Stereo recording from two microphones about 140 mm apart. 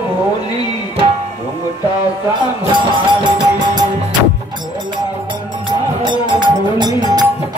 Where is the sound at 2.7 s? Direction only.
35° right (ahead or behind).